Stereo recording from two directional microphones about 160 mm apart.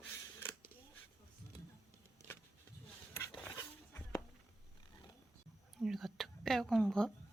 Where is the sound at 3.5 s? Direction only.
20° left (ahead or behind).